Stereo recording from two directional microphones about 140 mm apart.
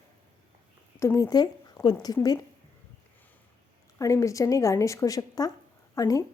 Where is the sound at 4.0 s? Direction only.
25° left (ahead or behind).